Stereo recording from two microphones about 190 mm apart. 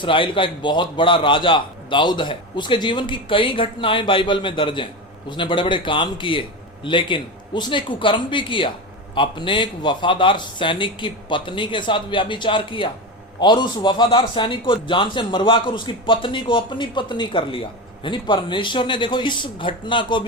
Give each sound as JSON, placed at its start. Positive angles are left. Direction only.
{"t": 0.0, "sound": "a man's voice", "side_deg": 25}